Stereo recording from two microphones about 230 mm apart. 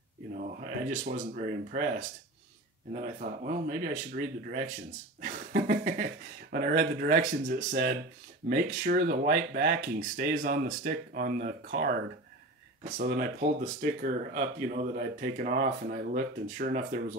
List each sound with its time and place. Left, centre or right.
0.3 s speech: right
12.9 s speech: right